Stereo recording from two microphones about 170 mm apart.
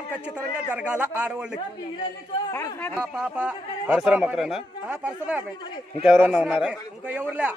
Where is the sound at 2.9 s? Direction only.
5° right (ahead or behind).